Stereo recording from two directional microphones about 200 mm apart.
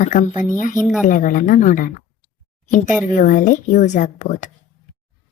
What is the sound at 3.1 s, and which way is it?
A woman's voice, 40° left (ahead or behind).